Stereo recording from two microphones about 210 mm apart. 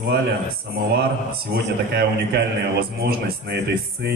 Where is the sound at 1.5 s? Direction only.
50° right (ahead or behind).